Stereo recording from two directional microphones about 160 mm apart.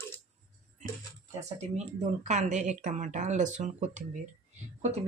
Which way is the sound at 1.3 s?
45° right (ahead or behind).